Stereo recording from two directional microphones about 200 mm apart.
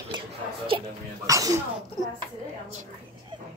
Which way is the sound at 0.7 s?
20° right (ahead or behind).